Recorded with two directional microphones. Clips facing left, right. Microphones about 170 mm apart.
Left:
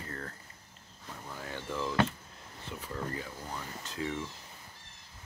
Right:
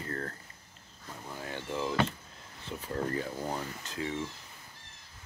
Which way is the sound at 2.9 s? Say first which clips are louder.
Right 6 dB; 40° right (ahead or behind).